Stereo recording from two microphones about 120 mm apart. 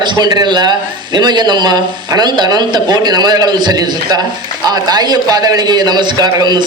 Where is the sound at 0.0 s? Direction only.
35° right (ahead or behind).